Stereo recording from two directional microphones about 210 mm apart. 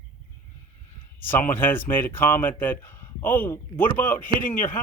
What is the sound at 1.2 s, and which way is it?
Speech, 10° left (ahead or behind).